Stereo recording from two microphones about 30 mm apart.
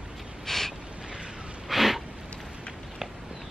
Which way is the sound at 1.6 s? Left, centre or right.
Centre.